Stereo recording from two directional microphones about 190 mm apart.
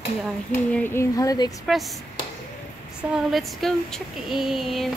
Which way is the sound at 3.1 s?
Centre (ahead or behind).